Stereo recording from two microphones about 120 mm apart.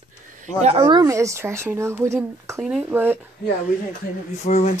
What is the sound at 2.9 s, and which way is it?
Speech, 15° right (ahead or behind).